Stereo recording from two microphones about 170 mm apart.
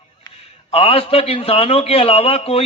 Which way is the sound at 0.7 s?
35° left (ahead or behind).